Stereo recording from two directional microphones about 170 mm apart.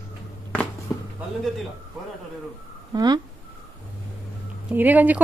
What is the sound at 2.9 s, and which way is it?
Speech, 25° right (ahead or behind).